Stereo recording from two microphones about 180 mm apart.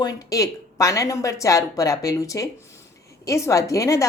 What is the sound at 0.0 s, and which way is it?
A woman's voice, 20° left (ahead or behind).